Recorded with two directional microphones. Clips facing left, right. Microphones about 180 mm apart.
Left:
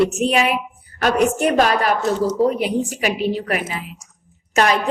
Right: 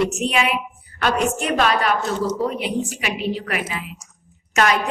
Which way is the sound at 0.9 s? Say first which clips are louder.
Left 2 dB; 40° left (ahead or behind).